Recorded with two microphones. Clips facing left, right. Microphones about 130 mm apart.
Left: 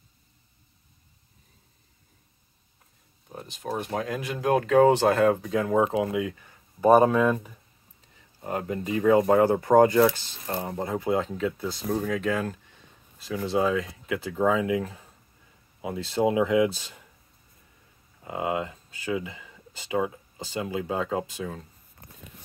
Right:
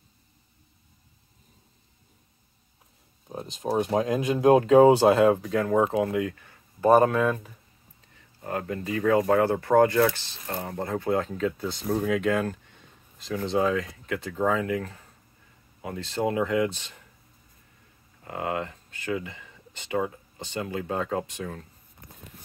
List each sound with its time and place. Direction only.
3.3 s speech: 25° right (ahead or behind)
5.5 s speech: 15° left (ahead or behind)
18.2 s speech: 15° left (ahead or behind)